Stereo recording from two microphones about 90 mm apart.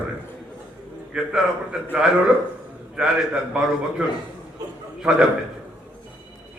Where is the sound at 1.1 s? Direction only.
10° right (ahead or behind).